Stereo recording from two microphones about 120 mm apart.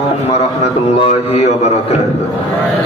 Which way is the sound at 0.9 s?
55° left (ahead or behind).